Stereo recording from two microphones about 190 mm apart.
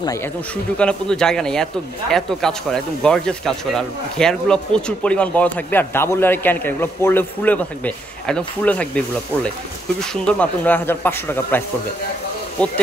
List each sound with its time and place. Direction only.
0.0 s speech: 15° left (ahead or behind)
0.7 s speech: 5° left (ahead or behind)